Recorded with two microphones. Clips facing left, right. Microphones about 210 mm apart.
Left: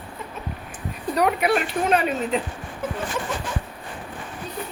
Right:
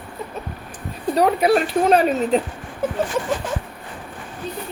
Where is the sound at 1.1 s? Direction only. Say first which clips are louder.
Right 4 dB; 30° right (ahead or behind).